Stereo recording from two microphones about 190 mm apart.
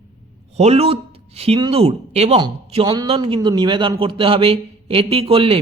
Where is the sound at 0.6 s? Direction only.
35° right (ahead or behind).